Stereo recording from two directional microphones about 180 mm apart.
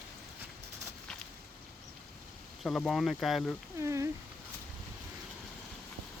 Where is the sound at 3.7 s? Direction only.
15° right (ahead or behind).